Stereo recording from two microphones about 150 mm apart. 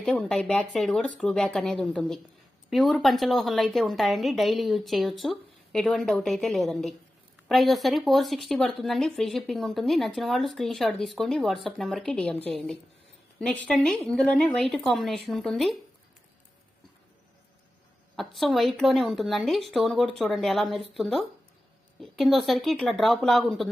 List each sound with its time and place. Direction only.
0.0 s speech: 5° left (ahead or behind)
18.2 s speech: centre (ahead or behind)